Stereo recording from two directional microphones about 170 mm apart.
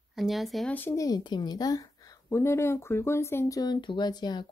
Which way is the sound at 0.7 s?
15° left (ahead or behind).